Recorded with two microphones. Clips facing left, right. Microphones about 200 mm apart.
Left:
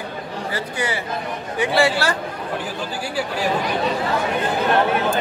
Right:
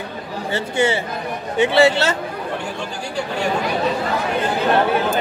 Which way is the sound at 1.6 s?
25° right (ahead or behind).